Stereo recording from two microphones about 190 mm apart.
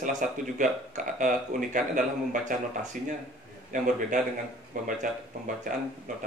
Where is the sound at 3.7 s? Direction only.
40° right (ahead or behind).